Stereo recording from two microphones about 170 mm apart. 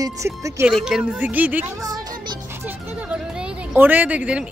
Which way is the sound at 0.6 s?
5° right (ahead or behind).